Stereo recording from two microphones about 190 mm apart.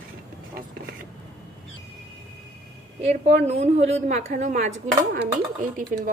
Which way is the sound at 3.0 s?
35° right (ahead or behind).